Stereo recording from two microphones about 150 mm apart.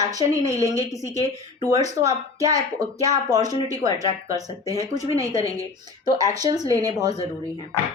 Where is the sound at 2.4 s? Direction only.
25° right (ahead or behind).